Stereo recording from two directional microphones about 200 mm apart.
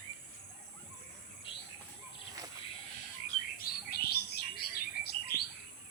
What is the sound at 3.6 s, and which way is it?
Bird, 50° left (ahead or behind).